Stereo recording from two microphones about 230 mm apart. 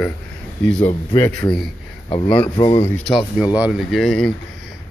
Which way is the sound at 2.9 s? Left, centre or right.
Centre.